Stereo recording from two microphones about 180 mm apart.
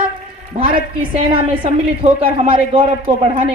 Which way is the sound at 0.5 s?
40° right (ahead or behind).